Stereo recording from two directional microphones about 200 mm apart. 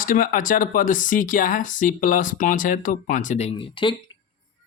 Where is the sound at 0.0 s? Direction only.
40° left (ahead or behind); by 3.9 s 25° left (ahead or behind).